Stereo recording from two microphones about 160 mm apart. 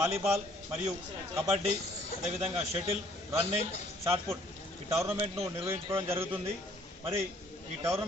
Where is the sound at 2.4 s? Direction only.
35° right (ahead or behind).